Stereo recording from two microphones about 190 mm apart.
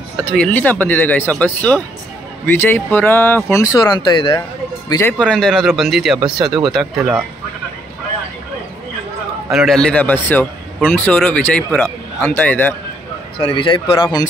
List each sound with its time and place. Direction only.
0.3 s speech: 5° left (ahead or behind)
5.2 s speech: 5° left (ahead or behind)
9.5 s speech: centre (ahead or behind)
13.4 s speech: 25° left (ahead or behind)